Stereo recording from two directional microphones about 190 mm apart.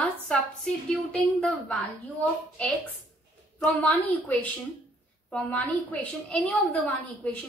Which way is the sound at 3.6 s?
10° left (ahead or behind).